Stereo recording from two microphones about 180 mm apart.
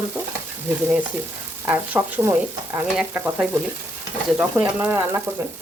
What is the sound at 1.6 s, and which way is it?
Speech, 10° right (ahead or behind).